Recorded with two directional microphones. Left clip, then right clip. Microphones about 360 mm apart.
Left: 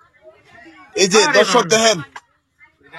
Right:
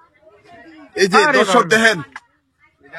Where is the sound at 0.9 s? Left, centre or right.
Centre.